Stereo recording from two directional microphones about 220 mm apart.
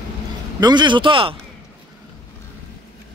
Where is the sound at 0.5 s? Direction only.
20° right (ahead or behind).